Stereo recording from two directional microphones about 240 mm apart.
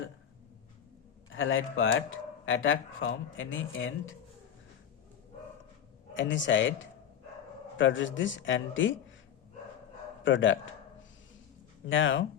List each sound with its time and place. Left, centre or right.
1.3 s speech: left
6.1 s speech: left
10.2 s speech: left
11.9 s speech: left